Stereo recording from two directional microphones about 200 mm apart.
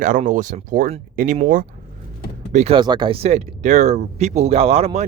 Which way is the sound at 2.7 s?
20° right (ahead or behind).